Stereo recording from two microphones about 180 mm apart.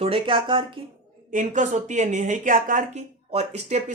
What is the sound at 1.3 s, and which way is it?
Speech, 45° right (ahead or behind).